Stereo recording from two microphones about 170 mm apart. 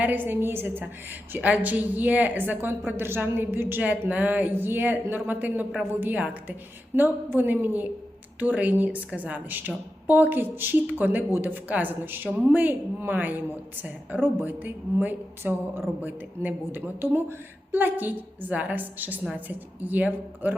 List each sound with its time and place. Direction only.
0.0 s a woman's voice: 10° right (ahead or behind)